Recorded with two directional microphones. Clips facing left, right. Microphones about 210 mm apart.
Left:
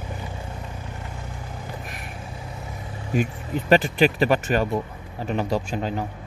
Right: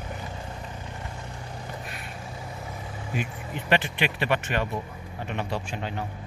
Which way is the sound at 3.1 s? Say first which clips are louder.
Left 8 dB; 40° left (ahead or behind).